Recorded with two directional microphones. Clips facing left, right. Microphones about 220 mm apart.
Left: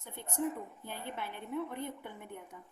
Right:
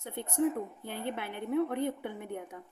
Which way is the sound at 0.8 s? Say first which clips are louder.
Right 5 dB; 70° right (ahead or behind).